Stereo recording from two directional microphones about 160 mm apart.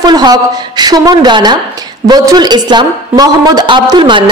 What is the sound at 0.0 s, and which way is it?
A woman's voice, 25° right (ahead or behind).